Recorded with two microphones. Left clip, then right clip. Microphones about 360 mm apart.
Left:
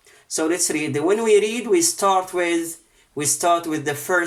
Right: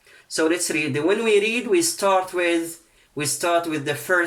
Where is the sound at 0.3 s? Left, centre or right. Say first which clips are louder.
Right 1 dB; centre.